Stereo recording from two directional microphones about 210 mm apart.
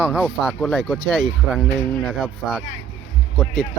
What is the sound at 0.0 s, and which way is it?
Speech, centre (ahead or behind).